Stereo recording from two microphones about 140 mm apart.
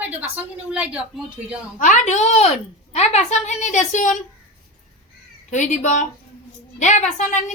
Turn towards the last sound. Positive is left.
turn(degrees=55)  # may be behind; listen again after turning